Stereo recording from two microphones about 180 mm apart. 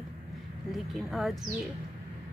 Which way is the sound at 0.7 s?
Centre (ahead or behind).